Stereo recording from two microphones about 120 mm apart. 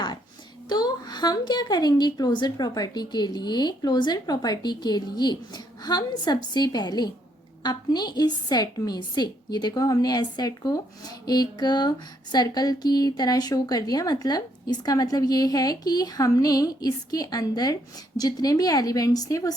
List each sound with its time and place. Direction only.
0.7 s a woman's voice: 35° left (ahead or behind)